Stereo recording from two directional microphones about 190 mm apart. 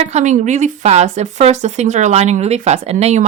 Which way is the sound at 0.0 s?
35° right (ahead or behind).